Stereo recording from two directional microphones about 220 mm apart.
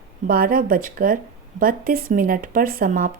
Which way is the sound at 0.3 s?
40° right (ahead or behind).